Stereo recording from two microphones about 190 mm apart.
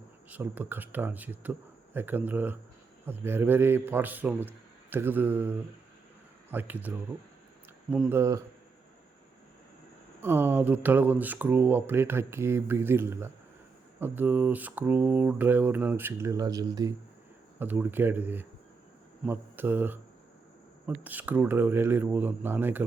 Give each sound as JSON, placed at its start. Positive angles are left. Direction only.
{"t": 0.3, "sound": "speech", "side_deg": -10}
{"t": 8.2, "sound": "speech", "side_deg": -15}
{"t": 10.2, "sound": "speech", "side_deg": -10}